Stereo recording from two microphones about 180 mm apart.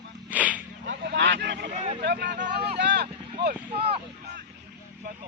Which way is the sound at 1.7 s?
35° right (ahead or behind).